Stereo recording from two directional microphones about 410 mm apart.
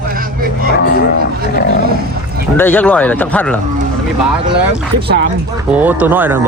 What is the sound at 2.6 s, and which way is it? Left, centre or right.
Speech, centre.